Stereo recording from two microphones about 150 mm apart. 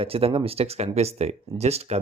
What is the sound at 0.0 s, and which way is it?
Speech, 40° right (ahead or behind).